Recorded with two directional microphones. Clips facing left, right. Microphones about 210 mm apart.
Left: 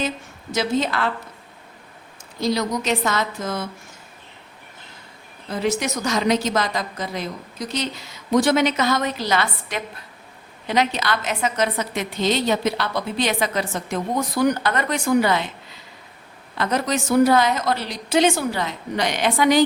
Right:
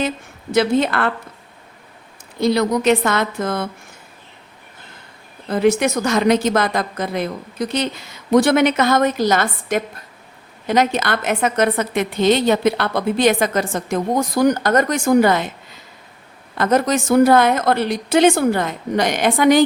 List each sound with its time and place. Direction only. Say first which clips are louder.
0.5 s a woman's voice: right 6 dB; 60° right (ahead or behind)
2.4 s a woman's voice: right 6 dB; 60° right (ahead or behind)
5.5 s a woman's voice: right 7 dB; 60° right (ahead or behind)
16.6 s a woman's voice: right 6 dB; 45° right (ahead or behind)